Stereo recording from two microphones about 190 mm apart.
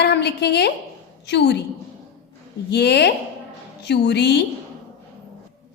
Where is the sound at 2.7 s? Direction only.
60° left (ahead or behind).